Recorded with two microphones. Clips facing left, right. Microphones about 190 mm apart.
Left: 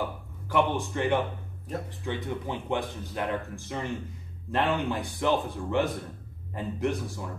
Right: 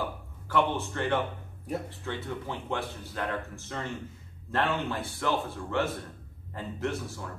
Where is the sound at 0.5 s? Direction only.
15° left (ahead or behind).